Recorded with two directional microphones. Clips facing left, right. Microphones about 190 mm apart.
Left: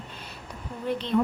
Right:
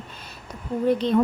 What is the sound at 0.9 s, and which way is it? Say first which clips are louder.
Speech: right 5 dB; 40° right (ahead or behind).